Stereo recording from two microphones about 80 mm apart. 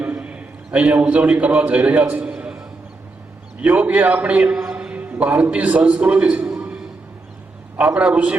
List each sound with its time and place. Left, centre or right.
0.0 s a man's voice: centre
2.2 s a sound: centre
3.6 s a man's voice: centre
4.8 s a sound: centre
5.4 s a man's voice: centre
7.8 s a man's voice: centre